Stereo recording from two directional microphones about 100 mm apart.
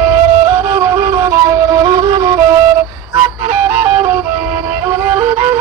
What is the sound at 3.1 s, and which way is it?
Music, 25° right (ahead or behind).